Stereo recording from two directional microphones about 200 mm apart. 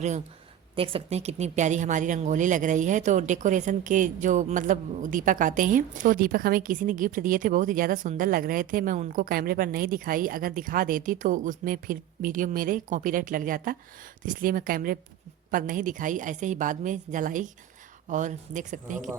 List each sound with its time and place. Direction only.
0.8 s a woman's voice: 30° right (ahead or behind)